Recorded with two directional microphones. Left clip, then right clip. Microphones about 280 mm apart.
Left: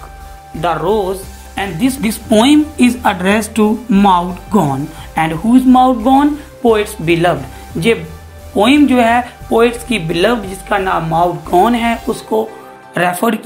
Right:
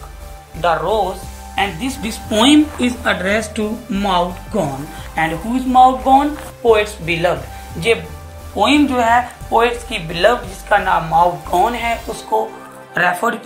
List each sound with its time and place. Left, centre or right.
0.6 s speech: left
8.5 s speech: left
12.9 s speech: left